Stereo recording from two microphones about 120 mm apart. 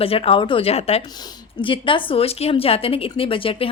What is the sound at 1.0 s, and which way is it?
A woman's voice, 35° left (ahead or behind).